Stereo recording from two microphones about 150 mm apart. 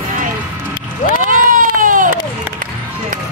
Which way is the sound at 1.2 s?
65° right (ahead or behind).